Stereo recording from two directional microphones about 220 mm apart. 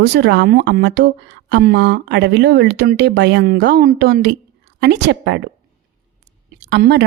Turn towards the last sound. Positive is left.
turn(degrees=-50)  # may be behind; listen again after turning